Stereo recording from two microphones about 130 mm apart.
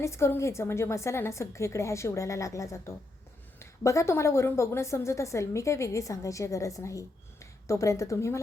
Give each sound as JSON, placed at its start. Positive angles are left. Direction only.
{"t": 0.0, "sound": "a woman's voice", "side_deg": 20}